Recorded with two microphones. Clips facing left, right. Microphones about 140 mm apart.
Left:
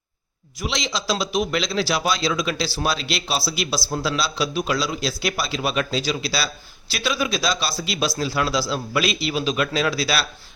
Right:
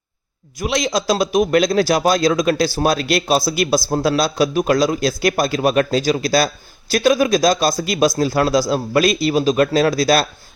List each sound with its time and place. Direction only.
0.6 s a man's voice: 50° right (ahead or behind)